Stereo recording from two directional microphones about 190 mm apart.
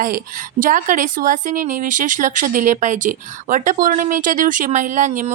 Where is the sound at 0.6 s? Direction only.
45° right (ahead or behind).